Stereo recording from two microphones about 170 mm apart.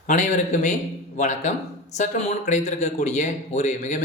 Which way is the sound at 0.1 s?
45° left (ahead or behind).